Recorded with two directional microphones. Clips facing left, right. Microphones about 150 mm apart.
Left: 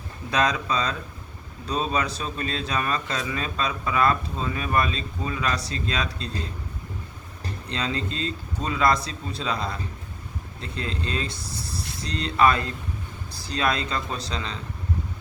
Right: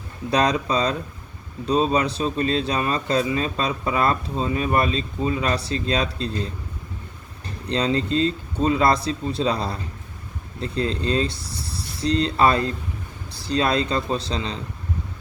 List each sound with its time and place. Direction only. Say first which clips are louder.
0.3 s speech: right 4 dB; 35° right (ahead or behind)
7.7 s speech: right 8 dB; 35° right (ahead or behind)